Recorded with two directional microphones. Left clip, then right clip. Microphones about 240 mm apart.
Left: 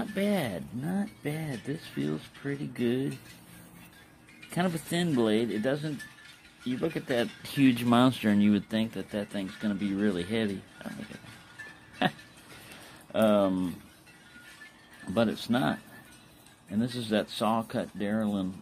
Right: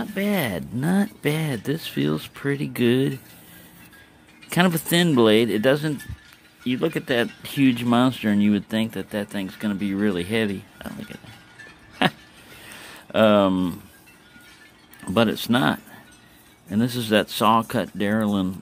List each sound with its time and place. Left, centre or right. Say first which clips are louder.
0.0 s speech: right 5 dB; centre
0.7 s speech: right 11 dB; right
4.5 s speech: right 10 dB; right
7.5 s speech: right 4 dB; centre; by 10.9 s right
12.0 s a sound: right 7 dB; right
12.8 s speech: right 8 dB; right
15.1 s speech: right 7 dB; right